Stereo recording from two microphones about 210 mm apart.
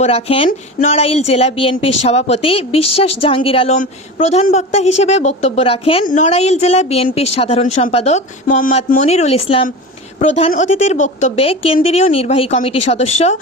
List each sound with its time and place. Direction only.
0.0 s a woman's voice: 30° left (ahead or behind)